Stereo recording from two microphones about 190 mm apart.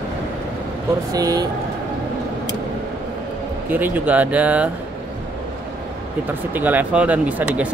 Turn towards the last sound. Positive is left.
turn(degrees=-5)  # may be behind; listen again after turning